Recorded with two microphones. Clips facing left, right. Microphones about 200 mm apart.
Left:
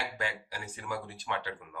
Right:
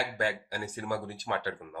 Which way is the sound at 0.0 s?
45° right (ahead or behind).